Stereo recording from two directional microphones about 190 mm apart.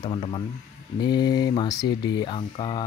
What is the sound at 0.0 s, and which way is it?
Speech, 25° left (ahead or behind).